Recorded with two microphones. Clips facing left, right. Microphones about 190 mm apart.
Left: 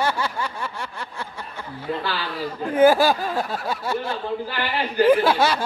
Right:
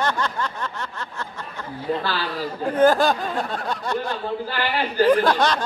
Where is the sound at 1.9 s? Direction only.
40° right (ahead or behind).